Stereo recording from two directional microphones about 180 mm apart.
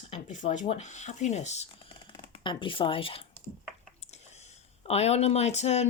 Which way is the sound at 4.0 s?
40° left (ahead or behind).